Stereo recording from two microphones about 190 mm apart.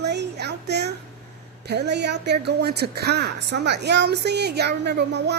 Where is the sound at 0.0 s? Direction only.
65° right (ahead or behind).